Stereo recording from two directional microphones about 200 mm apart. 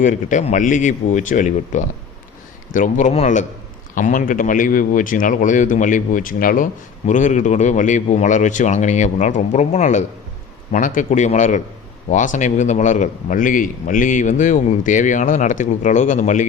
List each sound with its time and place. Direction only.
0.0 s a man's voice: 40° left (ahead or behind)